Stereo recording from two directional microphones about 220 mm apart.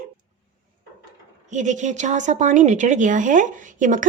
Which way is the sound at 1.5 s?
35° right (ahead or behind).